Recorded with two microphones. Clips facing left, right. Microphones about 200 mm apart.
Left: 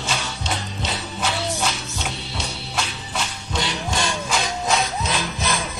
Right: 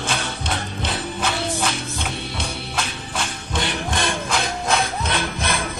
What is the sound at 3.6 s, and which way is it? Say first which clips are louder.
Music: right 1 dB; 55° right (ahead or behind).